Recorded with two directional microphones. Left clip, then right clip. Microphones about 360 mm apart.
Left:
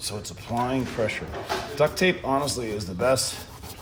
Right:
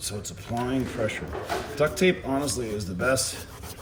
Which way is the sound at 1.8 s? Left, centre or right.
Centre.